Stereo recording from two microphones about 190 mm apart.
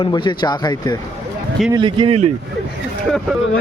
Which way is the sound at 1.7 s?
25° right (ahead or behind).